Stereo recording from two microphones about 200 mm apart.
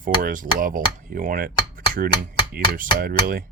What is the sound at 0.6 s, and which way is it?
Speech, 45° right (ahead or behind).